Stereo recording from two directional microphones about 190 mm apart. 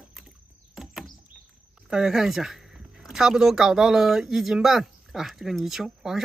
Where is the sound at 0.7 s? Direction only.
Centre (ahead or behind).